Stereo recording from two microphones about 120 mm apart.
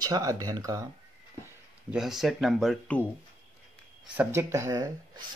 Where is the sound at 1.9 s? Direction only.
5° right (ahead or behind).